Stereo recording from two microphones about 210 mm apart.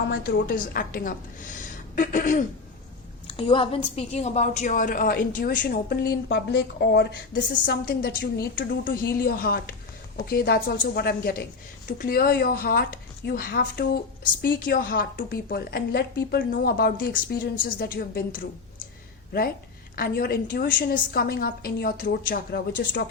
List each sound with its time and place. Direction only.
0.1 s a woman's voice: 40° left (ahead or behind)
3.2 s a woman's voice: 25° left (ahead or behind); by 18.4 s 45° left (ahead or behind)
20.0 s a woman's voice: 45° left (ahead or behind)